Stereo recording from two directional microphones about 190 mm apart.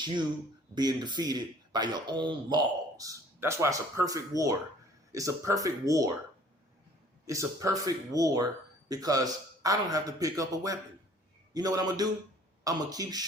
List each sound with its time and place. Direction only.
0.8 s speech: 20° right (ahead or behind)
7.3 s speech: 15° right (ahead or behind)